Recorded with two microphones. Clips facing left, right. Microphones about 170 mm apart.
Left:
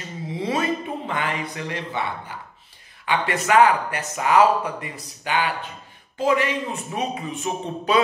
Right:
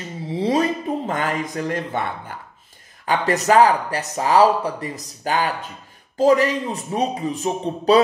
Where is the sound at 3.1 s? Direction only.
40° right (ahead or behind).